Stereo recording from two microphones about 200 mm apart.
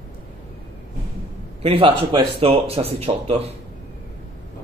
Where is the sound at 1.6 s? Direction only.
30° right (ahead or behind).